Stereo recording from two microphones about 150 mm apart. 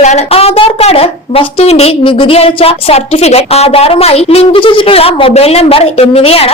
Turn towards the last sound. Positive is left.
turn(degrees=40)  # may be behind; listen again after turning